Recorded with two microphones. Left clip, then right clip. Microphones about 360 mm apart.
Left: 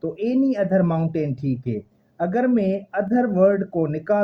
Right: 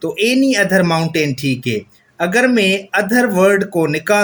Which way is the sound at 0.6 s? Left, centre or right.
Left.